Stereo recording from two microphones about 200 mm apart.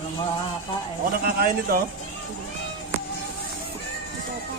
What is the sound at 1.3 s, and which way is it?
Speech, 45° right (ahead or behind).